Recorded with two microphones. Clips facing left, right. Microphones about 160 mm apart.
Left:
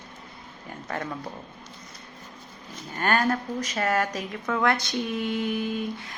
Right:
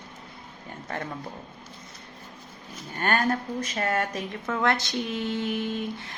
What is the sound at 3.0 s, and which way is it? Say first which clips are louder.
Speech: left 1 dB; 30° right (ahead or behind).